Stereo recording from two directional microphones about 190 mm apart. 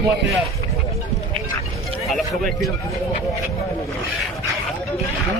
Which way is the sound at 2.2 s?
Centre (ahead or behind).